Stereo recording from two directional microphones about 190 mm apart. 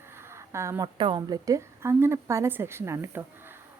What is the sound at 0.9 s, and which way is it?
A woman's voice, 25° right (ahead or behind).